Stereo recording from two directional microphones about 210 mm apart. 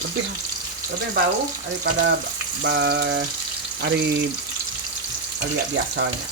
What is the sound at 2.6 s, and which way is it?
Speech, 55° right (ahead or behind).